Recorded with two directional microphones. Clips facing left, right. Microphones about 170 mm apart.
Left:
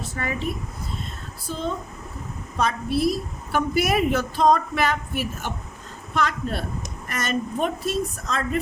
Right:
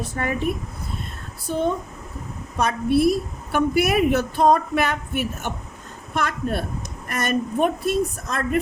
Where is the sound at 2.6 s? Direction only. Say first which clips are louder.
Right 4 dB; 55° right (ahead or behind).